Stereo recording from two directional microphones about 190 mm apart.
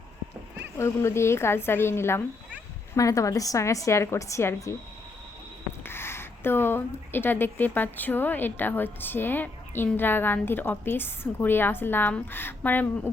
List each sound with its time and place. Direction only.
0.8 s a woman's voice: 15° left (ahead or behind)
5.8 s a woman's voice: 10° left (ahead or behind)